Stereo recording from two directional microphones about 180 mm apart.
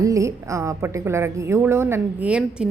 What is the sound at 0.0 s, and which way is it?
A woman's voice, 20° right (ahead or behind).